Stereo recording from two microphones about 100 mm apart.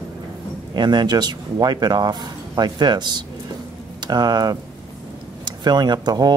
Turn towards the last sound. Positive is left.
turn(degrees=-45)  # may be behind; listen again after turning